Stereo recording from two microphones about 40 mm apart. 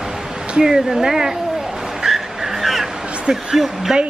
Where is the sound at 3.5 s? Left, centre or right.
Centre.